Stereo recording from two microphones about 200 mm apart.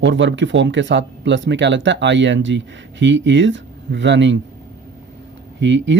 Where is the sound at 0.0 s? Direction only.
65° right (ahead or behind).